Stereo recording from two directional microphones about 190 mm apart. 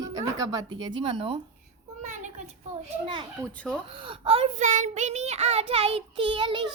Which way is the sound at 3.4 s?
5° left (ahead or behind).